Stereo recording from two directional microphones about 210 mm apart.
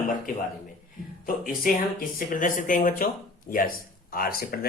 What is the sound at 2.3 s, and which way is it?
Speech, 40° left (ahead or behind).